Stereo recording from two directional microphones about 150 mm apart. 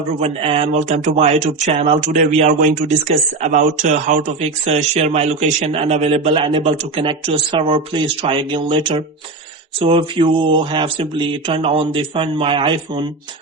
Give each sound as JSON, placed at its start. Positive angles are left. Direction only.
{"t": 0.2, "sound": "speech", "side_deg": -40}
{"t": 2.0, "sound": "speech", "side_deg": -50}